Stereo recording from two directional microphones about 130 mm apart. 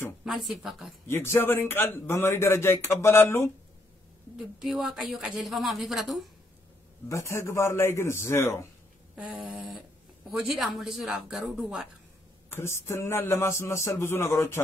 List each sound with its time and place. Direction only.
0.2 s a woman's voice: centre (ahead or behind)
1.0 s a man's voice: 20° left (ahead or behind)
4.4 s a woman's voice: centre (ahead or behind)
7.1 s a man's voice: 20° left (ahead or behind)
9.1 s a woman's voice: 5° right (ahead or behind)
12.5 s a man's voice: 20° left (ahead or behind)